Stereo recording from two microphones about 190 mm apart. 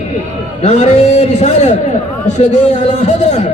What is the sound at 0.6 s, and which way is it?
A man's voice, 35° left (ahead or behind).